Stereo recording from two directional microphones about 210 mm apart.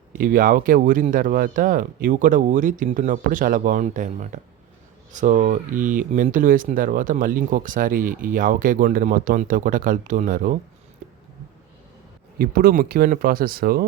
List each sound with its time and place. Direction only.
0.2 s speech: 40° right (ahead or behind)
12.4 s speech: 45° right (ahead or behind)